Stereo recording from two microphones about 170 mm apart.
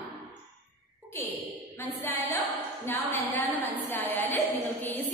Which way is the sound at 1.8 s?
15° left (ahead or behind).